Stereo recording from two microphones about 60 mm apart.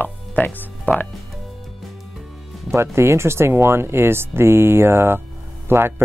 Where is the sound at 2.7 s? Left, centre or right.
Right.